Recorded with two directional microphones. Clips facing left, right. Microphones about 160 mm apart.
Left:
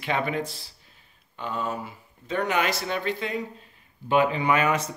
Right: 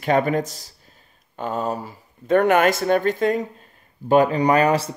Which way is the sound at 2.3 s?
55° right (ahead or behind).